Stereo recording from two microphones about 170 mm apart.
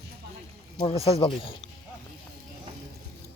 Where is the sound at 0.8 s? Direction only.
35° left (ahead or behind).